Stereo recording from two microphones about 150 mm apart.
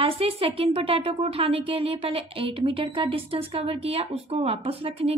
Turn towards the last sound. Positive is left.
turn(degrees=-40)  # may be behind; listen again after turning